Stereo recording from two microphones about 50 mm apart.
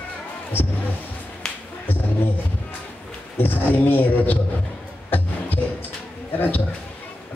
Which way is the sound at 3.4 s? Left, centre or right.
Left.